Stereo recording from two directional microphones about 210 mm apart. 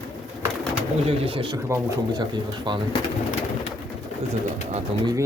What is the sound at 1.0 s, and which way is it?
Speech, 25° right (ahead or behind).